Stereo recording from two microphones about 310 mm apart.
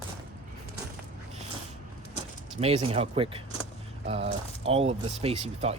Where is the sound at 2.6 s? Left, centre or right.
Centre.